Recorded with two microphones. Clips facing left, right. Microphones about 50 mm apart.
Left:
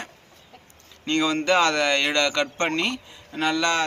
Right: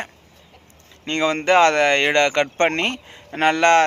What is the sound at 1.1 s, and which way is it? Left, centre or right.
Speech, right.